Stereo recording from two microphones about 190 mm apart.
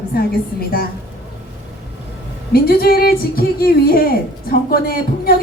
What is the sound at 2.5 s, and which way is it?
A woman's voice, 55° left (ahead or behind).